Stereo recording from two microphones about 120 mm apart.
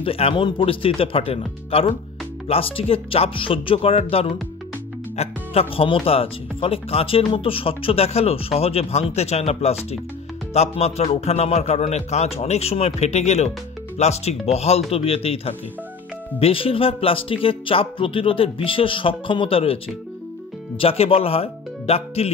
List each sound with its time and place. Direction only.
0.0 s speech: 50° left (ahead or behind)